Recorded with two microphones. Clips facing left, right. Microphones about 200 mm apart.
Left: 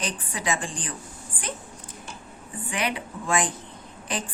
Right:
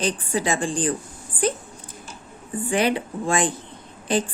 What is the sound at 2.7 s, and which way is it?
A woman's voice, 30° right (ahead or behind).